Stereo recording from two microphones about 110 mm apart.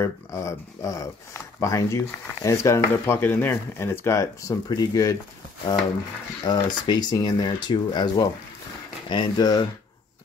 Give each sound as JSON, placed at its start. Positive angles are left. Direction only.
{"t": 0.0, "sound": "speech", "side_deg": 25}
{"t": 6.4, "sound": "speech", "side_deg": 40}